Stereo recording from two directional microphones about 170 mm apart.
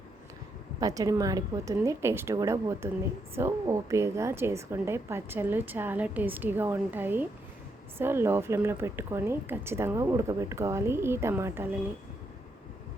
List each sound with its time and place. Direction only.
0.8 s a woman's voice: 20° right (ahead or behind)